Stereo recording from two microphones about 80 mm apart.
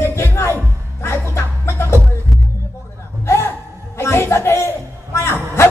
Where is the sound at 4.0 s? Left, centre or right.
Left.